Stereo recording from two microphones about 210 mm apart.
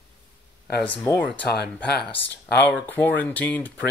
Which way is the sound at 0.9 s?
15° left (ahead or behind).